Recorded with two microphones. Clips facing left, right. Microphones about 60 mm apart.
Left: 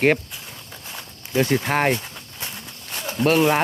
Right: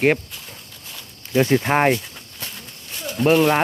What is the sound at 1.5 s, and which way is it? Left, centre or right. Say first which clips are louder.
Speech: right 4 dB; centre.